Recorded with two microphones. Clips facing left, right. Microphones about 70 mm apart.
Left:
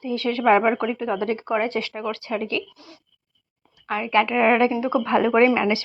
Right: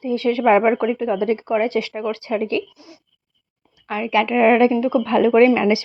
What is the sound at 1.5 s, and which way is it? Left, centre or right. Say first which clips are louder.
Speech: right 2 dB; centre.